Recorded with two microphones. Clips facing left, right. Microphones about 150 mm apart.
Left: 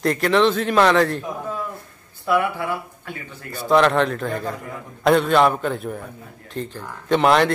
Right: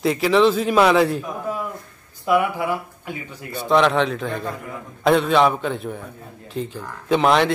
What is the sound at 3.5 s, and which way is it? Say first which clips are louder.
A man's voice: left 1 dB; centre (ahead or behind).